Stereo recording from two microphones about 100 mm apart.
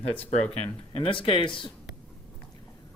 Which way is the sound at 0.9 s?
60° left (ahead or behind).